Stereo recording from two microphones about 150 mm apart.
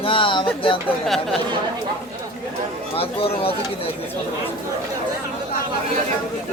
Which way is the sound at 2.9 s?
40° left (ahead or behind).